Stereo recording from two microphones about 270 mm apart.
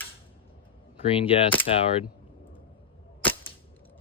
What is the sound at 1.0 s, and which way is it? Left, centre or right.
Speech, left.